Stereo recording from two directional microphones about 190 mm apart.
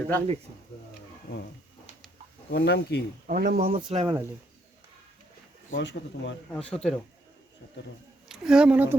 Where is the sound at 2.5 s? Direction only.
60° left (ahead or behind).